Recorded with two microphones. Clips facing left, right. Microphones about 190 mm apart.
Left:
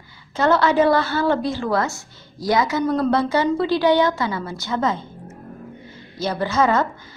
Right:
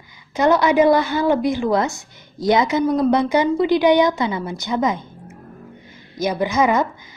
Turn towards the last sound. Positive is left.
turn(degrees=-15)  # may be behind; listen again after turning